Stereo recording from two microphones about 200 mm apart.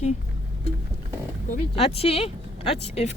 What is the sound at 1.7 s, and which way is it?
Speech, 30° left (ahead or behind).